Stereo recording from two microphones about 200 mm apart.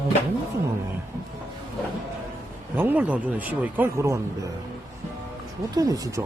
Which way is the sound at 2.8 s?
10° right (ahead or behind).